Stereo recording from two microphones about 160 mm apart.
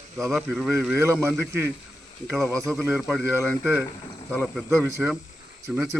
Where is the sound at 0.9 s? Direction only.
15° right (ahead or behind).